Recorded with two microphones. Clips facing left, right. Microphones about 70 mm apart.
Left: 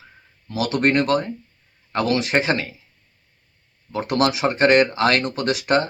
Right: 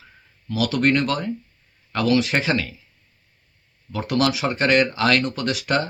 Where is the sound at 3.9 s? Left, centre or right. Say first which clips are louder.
Left 1 dB; left.